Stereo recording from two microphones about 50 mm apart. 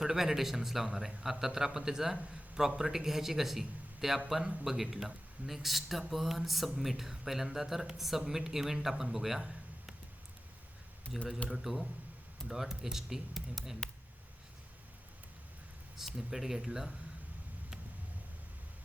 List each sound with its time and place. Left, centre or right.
0.0 s speech: centre
11.1 s speech: centre
13.8 s a sound: centre
16.1 s speech: centre